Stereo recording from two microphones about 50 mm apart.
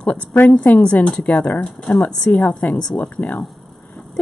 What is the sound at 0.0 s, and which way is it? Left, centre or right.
A woman's voice, left.